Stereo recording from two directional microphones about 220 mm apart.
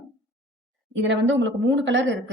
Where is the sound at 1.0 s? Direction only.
55° right (ahead or behind).